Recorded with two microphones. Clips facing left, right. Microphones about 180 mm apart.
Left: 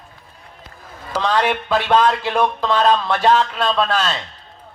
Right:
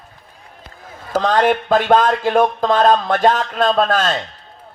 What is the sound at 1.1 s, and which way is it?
Speech, 50° right (ahead or behind).